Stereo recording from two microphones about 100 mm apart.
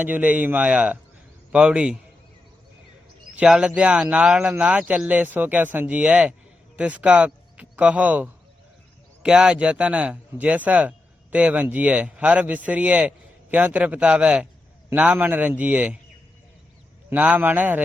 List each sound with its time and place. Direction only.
0.0 s speech: 15° right (ahead or behind)
3.3 s a man's voice: 10° right (ahead or behind)
17.1 s speech: 15° right (ahead or behind)